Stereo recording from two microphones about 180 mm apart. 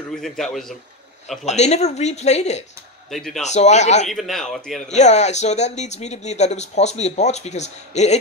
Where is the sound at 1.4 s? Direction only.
40° left (ahead or behind).